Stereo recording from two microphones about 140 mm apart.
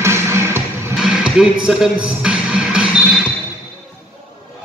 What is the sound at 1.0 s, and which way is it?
Music, 5° right (ahead or behind).